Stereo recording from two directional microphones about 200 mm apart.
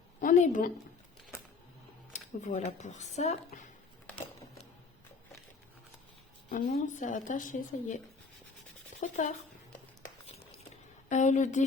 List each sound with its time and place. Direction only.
0.2 s speech: 40° left (ahead or behind)
2.1 s a woman's voice: 35° left (ahead or behind)
6.5 s a woman's voice: 45° left (ahead or behind)
11.1 s a woman's voice: 35° left (ahead or behind)